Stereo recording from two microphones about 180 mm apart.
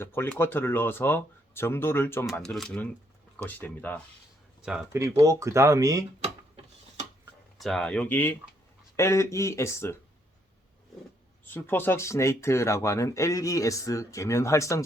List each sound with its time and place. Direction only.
0.0 s speech: 10° left (ahead or behind)
4.9 s speech: 20° right (ahead or behind)
7.6 s speech: 5° left (ahead or behind)
11.4 s speech: 10° left (ahead or behind)